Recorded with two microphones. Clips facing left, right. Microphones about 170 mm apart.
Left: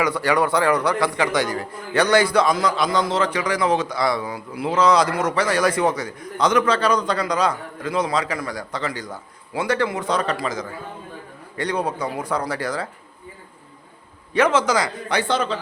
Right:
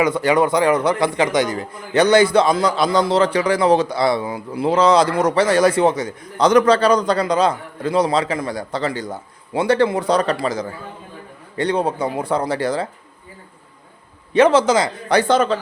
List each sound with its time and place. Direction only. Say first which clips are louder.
0.0 s a man's voice: right 4 dB; 20° right (ahead or behind)
14.3 s a man's voice: right 5 dB; 30° right (ahead or behind)
15.1 s a man's voice: right 7 dB; 45° right (ahead or behind)